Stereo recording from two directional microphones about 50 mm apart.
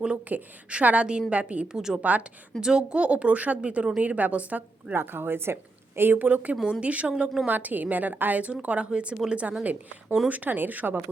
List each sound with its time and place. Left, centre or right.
0.3 s a woman's voice: right
1.6 s a woman's voice: centre
2.0 s a woman's voice: right
2.6 s a woman's voice: centre
4.9 s speech: right
6.2 s a woman's voice: right
7.4 s a woman's voice: right